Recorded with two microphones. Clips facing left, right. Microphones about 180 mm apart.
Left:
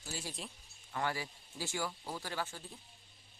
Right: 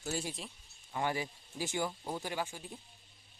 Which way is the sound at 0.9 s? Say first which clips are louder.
Right 3 dB; 20° right (ahead or behind).